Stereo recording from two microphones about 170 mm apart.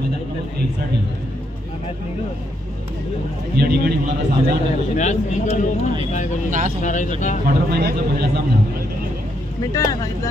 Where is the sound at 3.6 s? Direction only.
70° right (ahead or behind).